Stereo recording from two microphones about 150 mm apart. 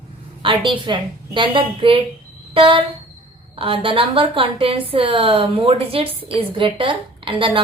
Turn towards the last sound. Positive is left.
turn(degrees=-35)  # may be behind; listen again after turning